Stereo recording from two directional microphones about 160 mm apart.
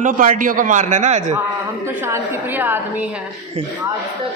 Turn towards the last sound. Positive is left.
turn(degrees=-10)  # may be behind; listen again after turning